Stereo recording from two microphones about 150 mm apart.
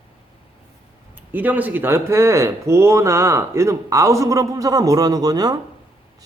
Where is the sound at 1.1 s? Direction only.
10° right (ahead or behind).